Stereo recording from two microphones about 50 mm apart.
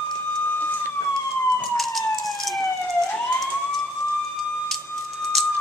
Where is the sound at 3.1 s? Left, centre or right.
Left.